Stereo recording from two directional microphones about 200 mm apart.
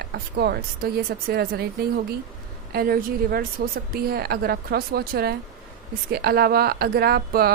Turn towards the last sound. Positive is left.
turn(degrees=-50)  # may be behind; listen again after turning